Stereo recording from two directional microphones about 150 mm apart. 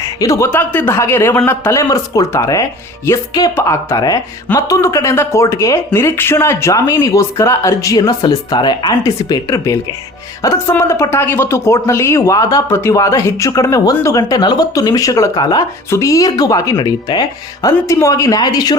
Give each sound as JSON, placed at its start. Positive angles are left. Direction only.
{"t": 0.0, "sound": "speech", "side_deg": 20}